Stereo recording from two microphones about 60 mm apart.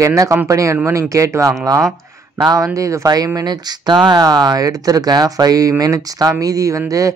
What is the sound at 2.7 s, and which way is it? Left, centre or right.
Speech, right.